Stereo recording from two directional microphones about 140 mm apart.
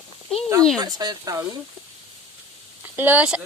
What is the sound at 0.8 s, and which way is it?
Speech, 30° right (ahead or behind).